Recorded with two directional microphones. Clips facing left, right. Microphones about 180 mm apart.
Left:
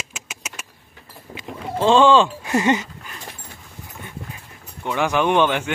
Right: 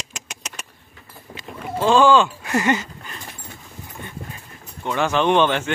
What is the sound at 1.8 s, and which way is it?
Speech, 25° left (ahead or behind).